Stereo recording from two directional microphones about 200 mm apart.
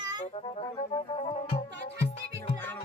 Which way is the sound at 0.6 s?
30° left (ahead or behind).